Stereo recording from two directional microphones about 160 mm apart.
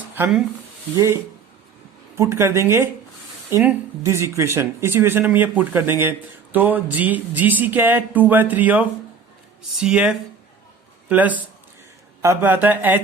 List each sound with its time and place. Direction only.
0.9 s speech: 15° right (ahead or behind)